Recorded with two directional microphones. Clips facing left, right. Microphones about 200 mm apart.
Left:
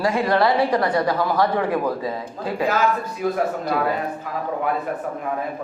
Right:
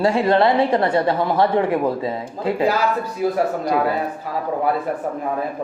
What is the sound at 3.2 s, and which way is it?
Speech, 35° right (ahead or behind).